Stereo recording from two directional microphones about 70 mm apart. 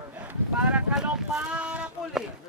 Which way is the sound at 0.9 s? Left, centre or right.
Centre.